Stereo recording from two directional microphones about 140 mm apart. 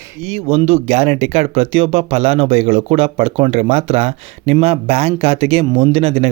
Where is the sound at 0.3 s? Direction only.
50° right (ahead or behind).